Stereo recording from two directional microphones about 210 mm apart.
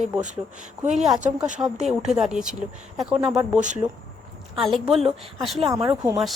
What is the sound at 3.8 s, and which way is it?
Speech, 20° right (ahead or behind).